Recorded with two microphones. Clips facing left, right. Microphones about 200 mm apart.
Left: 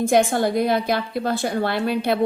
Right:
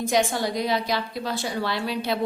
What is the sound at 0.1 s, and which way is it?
A woman's voice, 55° left (ahead or behind).